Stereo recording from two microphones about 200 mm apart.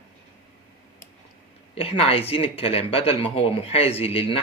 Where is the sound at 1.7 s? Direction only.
30° left (ahead or behind).